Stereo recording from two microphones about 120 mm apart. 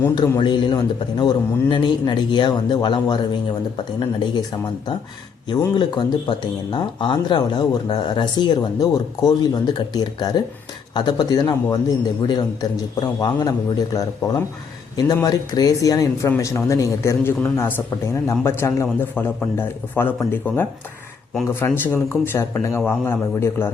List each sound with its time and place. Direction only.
0.2 s speech: 40° left (ahead or behind)
5.5 s speech: 40° left (ahead or behind); by 23.6 s 20° left (ahead or behind)